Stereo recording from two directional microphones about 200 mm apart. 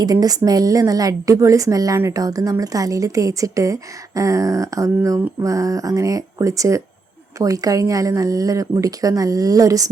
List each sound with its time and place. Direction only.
0.0 s a woman's voice: 20° right (ahead or behind)